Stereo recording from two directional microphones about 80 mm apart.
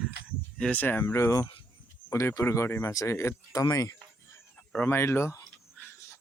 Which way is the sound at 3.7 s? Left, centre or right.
Left.